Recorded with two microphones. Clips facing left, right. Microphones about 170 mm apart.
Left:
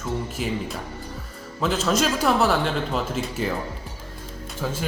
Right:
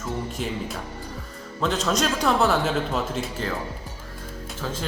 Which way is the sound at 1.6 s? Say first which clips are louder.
Left 1 dB; 5° left (ahead or behind).